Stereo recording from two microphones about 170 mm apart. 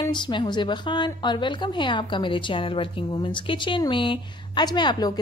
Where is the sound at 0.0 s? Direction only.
25° left (ahead or behind).